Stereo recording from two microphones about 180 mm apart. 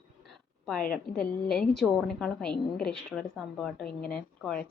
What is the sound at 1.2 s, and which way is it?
A woman's voice, 5° left (ahead or behind).